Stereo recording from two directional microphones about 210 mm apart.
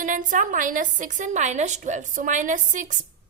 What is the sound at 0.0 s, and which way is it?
A woman's voice, 40° right (ahead or behind).